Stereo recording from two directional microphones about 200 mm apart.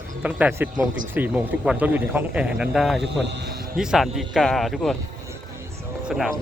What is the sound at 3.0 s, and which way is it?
Speech, 55° right (ahead or behind).